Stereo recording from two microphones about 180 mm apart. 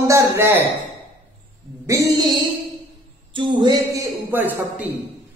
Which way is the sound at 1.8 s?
15° right (ahead or behind).